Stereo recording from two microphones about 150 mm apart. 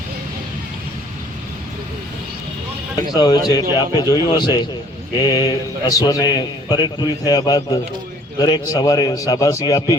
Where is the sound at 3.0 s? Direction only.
25° left (ahead or behind).